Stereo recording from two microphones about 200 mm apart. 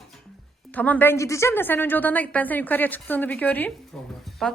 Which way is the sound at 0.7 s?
10° left (ahead or behind).